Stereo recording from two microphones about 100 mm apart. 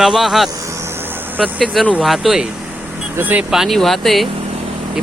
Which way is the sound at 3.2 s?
15° right (ahead or behind).